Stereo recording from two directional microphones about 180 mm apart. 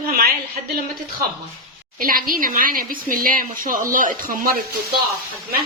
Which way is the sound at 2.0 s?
50° right (ahead or behind).